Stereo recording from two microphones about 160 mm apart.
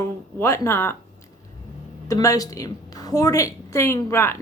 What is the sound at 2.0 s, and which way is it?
A woman's voice, 20° left (ahead or behind).